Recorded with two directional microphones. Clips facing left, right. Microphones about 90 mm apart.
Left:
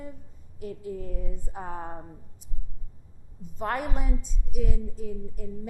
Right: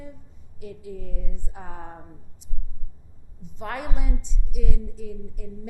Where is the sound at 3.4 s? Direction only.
40° left (ahead or behind).